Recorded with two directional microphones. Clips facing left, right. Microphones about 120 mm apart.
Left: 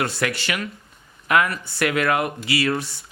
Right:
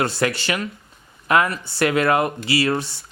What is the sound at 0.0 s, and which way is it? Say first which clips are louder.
Speech: right 3 dB; 30° right (ahead or behind).